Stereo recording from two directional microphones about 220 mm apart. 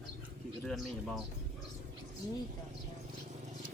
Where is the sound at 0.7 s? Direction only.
Centre (ahead or behind).